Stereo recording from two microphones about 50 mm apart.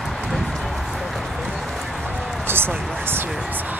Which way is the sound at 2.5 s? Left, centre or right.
Right.